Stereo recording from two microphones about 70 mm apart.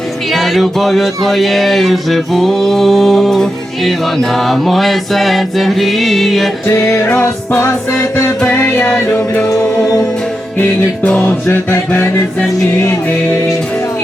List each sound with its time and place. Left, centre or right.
0.3 s music: centre
6.7 s music: left
7.0 s music: left
10.6 s music: centre
11.4 s music: left